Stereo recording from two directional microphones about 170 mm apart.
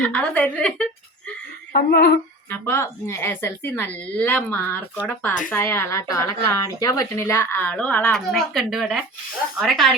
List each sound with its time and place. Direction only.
0.0 s speech: 10° left (ahead or behind)
1.7 s a sound: 70° left (ahead or behind)
2.5 s speech: 15° left (ahead or behind); by 9.9 s centre (ahead or behind)